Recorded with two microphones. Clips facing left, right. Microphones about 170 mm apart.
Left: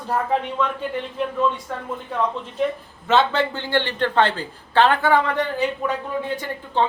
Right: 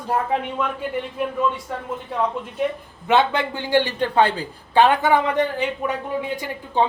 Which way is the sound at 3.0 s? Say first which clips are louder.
Even; 15° right (ahead or behind).